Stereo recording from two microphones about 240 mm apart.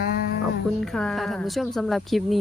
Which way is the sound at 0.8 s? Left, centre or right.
Centre.